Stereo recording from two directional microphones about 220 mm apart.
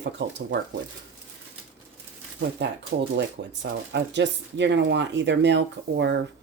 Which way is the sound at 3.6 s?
50° right (ahead or behind).